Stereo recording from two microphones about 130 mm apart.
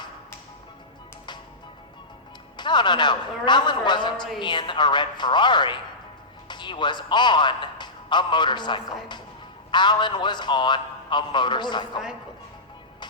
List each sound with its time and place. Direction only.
2.6 s a man's voice: 35° left (ahead or behind)